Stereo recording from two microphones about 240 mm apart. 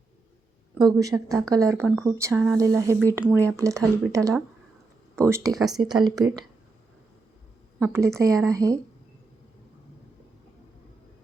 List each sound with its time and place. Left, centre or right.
0.8 s speech: centre
5.5 s speech: centre
5.9 s speech: centre
7.8 s speech: centre